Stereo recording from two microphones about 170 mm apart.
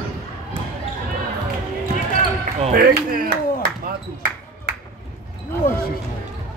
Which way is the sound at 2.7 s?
60° right (ahead or behind).